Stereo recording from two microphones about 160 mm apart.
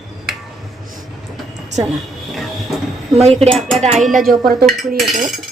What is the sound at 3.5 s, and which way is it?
Speech, 5° left (ahead or behind).